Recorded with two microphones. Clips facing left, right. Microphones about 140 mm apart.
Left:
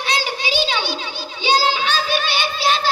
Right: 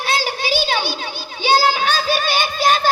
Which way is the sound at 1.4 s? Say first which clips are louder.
Right 2 dB; 45° right (ahead or behind).